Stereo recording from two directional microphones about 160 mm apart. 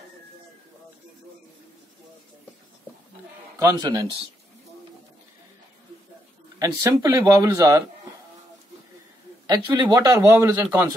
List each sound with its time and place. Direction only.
3.5 s speech: 20° right (ahead or behind)
6.6 s speech: 20° right (ahead or behind)
9.5 s speech: 25° right (ahead or behind)